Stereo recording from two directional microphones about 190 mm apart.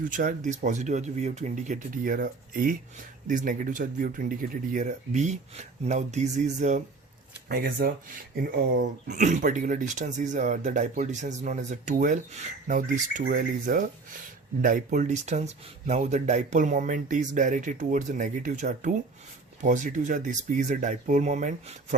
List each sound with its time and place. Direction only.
0.0 s speech: 45° right (ahead or behind)
7.4 s speech: 50° right (ahead or behind)